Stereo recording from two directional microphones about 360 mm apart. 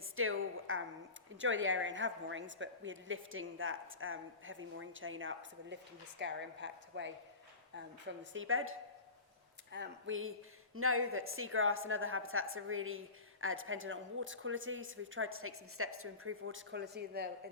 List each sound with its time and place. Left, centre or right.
0.2 s a sound: right
1.4 s a woman's voice: right
8.2 s a woman's voice: right
9.7 s a woman's voice: right